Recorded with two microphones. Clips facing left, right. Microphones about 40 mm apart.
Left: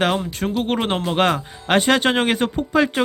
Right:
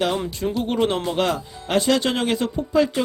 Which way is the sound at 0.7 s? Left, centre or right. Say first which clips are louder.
Even; left.